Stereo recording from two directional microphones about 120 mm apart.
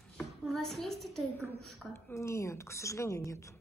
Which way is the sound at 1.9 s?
25° left (ahead or behind).